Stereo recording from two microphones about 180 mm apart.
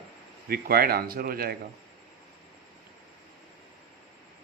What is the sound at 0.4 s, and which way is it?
Speech, 55° right (ahead or behind).